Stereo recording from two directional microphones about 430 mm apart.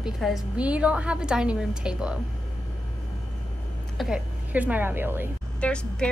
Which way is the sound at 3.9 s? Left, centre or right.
Centre.